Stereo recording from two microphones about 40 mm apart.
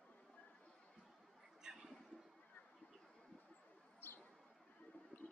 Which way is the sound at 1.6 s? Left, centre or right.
Centre.